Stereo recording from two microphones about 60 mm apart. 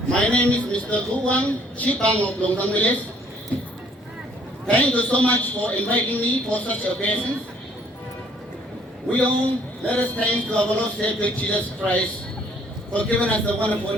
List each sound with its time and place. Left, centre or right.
0.1 s a woman's voice: centre
4.6 s a woman's voice: left
9.0 s a woman's voice: left